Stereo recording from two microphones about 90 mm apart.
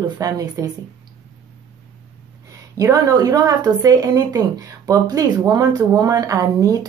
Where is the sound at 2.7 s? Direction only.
40° right (ahead or behind).